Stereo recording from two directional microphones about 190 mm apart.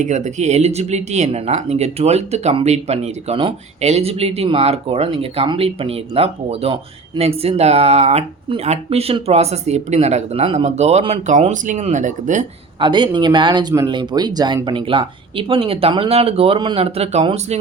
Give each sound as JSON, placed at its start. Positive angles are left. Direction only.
{"t": 0.0, "sound": "speech", "side_deg": -40}
{"t": 12.8, "sound": "speech", "side_deg": -25}